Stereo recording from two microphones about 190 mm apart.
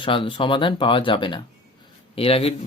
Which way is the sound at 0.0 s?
25° left (ahead or behind).